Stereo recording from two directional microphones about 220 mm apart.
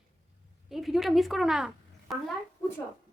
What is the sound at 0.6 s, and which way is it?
Speech, centre (ahead or behind).